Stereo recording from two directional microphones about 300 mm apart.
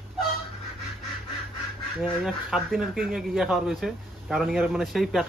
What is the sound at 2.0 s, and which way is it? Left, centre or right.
Speech, centre.